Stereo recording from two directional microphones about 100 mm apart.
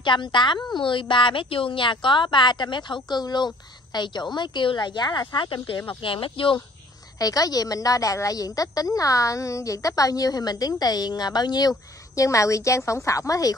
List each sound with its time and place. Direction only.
0.0 s speech: 50° left (ahead or behind)
5.3 s speech: 55° left (ahead or behind)
7.2 s speech: 35° left (ahead or behind)
12.2 s speech: 30° left (ahead or behind)